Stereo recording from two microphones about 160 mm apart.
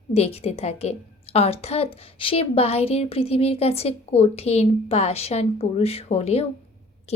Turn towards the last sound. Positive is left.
turn(degrees=40)  # may be behind; listen again after turning